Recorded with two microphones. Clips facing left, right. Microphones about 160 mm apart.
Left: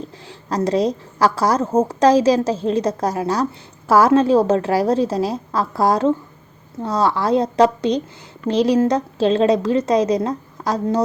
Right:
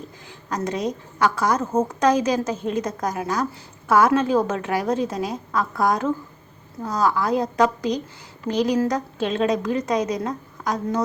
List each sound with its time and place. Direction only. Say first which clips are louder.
0.3 s a woman's voice: left 7 dB; 30° left (ahead or behind)